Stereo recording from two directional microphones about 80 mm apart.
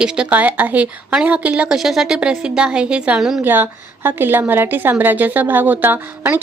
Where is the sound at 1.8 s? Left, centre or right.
Centre.